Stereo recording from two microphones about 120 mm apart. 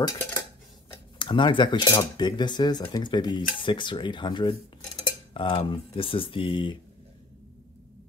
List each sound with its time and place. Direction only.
1.1 s speech: 45° left (ahead or behind)